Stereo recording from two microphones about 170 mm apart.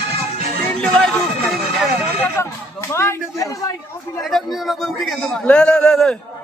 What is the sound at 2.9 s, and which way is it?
Speech, 15° left (ahead or behind).